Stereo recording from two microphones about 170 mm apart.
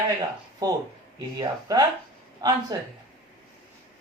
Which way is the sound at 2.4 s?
20° right (ahead or behind).